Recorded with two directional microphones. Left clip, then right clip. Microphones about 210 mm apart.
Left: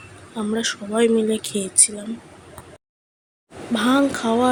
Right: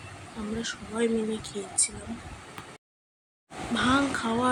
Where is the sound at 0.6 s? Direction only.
35° left (ahead or behind).